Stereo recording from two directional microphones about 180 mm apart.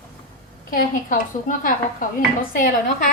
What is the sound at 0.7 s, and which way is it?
A woman's voice, 50° left (ahead or behind).